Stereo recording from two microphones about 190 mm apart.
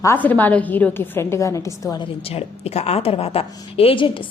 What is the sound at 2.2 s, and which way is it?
A woman's voice, 35° left (ahead or behind).